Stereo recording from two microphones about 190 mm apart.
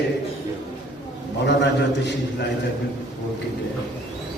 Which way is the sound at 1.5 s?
65° left (ahead or behind).